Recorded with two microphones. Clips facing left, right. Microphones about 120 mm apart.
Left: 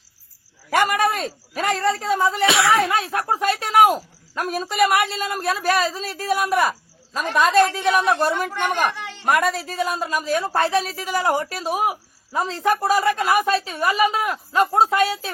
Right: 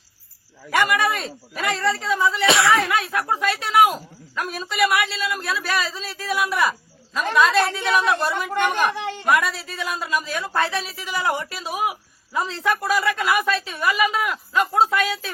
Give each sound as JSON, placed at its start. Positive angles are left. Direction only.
{"t": 0.7, "sound": "speech", "side_deg": 40}
{"t": 2.5, "sound": "speech", "side_deg": 0}
{"t": 2.8, "sound": "speech", "side_deg": 35}
{"t": 9.0, "sound": "a sound", "side_deg": -45}
{"t": 9.2, "sound": "a woman's voice", "side_deg": 45}